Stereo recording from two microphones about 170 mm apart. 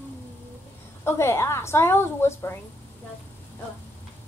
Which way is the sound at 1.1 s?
15° left (ahead or behind).